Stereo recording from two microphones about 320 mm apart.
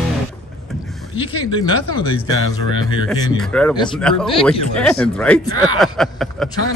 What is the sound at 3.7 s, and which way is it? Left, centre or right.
Speech, centre.